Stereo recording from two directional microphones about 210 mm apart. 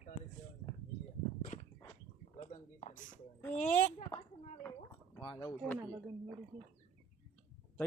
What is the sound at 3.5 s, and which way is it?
Speech, 35° left (ahead or behind).